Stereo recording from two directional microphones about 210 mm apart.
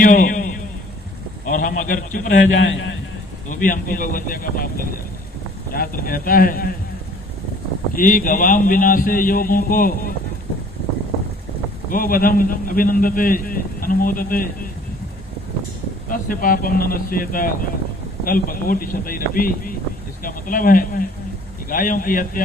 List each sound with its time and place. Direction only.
0.0 s a sound: 40° left (ahead or behind)
2.6 s a man's voice: 60° left (ahead or behind)
3.5 s a man's voice: 40° left (ahead or behind)
7.9 s a man's voice: 40° left (ahead or behind)
11.9 s a man's voice: 40° left (ahead or behind)
16.0 s a man's voice: 40° left (ahead or behind)